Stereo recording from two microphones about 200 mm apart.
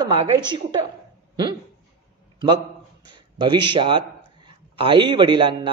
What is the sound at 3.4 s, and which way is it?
Speech, 25° right (ahead or behind).